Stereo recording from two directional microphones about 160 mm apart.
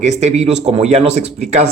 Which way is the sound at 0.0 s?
45° right (ahead or behind).